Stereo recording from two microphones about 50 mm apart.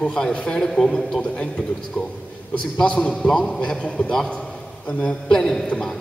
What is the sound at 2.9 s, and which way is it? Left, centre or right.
Speech, left.